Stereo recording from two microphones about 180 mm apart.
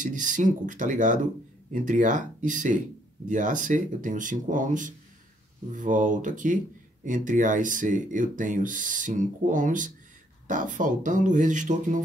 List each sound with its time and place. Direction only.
0.0 s speech: 45° right (ahead or behind)